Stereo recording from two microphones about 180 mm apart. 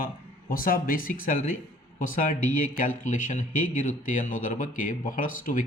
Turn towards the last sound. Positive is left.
turn(degrees=50)  # may be behind; listen again after turning